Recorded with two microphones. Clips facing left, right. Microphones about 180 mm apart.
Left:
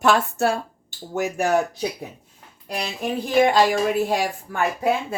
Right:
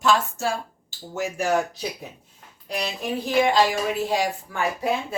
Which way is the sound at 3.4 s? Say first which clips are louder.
Left 4 dB; 55° left (ahead or behind).